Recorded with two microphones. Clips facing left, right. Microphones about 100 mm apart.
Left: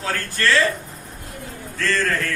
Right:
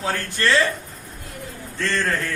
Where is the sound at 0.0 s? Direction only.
20° right (ahead or behind).